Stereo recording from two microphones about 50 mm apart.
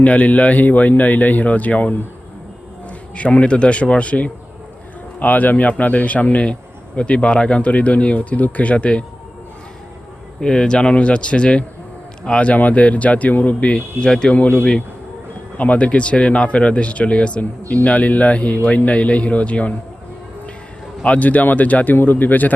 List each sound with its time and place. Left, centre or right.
0.0 s speech: left
3.2 s a man's voice: left
10.4 s a man's voice: centre
21.0 s speech: left